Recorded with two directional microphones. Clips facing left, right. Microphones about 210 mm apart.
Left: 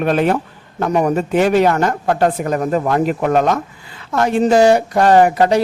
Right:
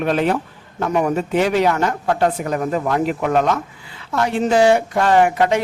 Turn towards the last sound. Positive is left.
turn(degrees=40)  # may be behind; listen again after turning